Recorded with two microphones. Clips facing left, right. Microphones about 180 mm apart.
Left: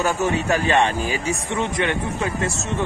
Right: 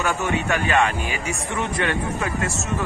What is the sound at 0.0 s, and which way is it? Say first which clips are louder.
Speech: left 2 dB; 35° left (ahead or behind).